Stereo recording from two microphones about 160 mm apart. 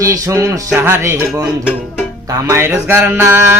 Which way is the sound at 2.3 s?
20° right (ahead or behind).